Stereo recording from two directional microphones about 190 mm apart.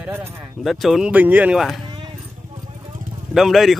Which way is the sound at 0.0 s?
10° right (ahead or behind).